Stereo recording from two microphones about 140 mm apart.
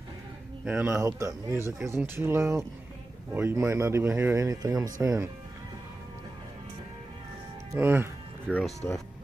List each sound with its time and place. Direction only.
0.7 s speech: 10° right (ahead or behind)
7.7 s music: 15° right (ahead or behind)
8.5 s speech: 5° left (ahead or behind)